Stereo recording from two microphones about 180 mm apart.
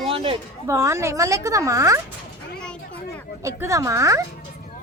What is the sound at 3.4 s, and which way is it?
Speech, 15° right (ahead or behind).